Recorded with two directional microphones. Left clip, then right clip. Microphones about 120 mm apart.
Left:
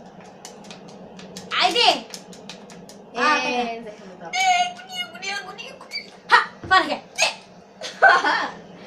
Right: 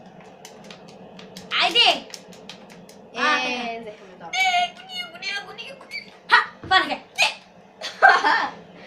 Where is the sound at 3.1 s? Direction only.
15° left (ahead or behind).